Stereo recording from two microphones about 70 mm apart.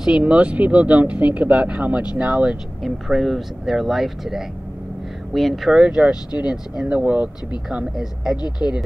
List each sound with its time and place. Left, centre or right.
0.0 s speech: centre
2.8 s speech: centre
7.7 s speech: centre
8.4 s speech: left